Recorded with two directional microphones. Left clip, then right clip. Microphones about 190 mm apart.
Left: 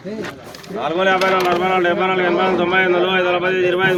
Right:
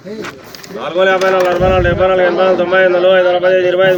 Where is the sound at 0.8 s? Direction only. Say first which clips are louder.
Right 4 dB; 30° left (ahead or behind).